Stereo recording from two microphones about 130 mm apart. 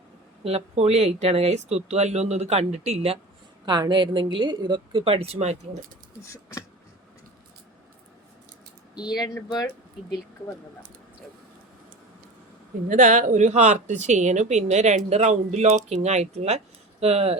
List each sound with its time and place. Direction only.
0.4 s speech: 55° right (ahead or behind)
3.7 s a woman's voice: 35° right (ahead or behind); by 5.5 s 55° right (ahead or behind)
6.2 s a sound: 25° left (ahead or behind)
9.0 s speech: 30° left (ahead or behind)
12.9 s speech: 65° right (ahead or behind)